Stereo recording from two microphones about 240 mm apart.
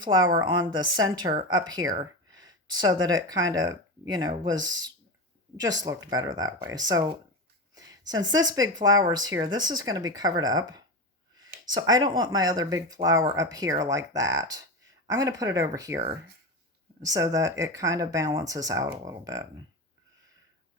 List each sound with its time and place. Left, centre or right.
0.0 s speech: centre
17.0 s speech: centre